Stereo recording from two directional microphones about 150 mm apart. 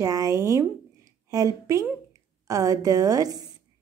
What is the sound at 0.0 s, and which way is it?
A woman's voice, 25° right (ahead or behind).